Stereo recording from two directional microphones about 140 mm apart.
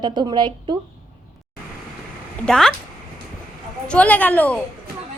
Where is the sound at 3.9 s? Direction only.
10° left (ahead or behind).